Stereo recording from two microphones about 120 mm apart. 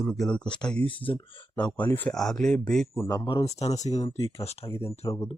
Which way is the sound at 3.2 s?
45° left (ahead or behind).